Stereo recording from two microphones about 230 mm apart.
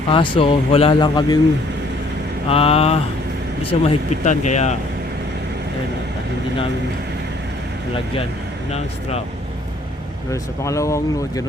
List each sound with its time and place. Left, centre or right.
0.1 s speech: left
2.5 s speech: left
8.7 s speech: left
10.3 s speech: centre